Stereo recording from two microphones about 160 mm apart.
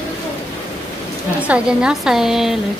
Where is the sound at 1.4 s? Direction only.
5° right (ahead or behind).